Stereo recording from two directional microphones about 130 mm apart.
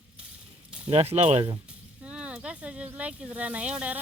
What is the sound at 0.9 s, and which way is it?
Speech, 50° right (ahead or behind).